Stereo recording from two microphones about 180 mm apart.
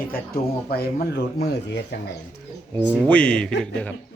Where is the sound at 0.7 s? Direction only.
60° left (ahead or behind).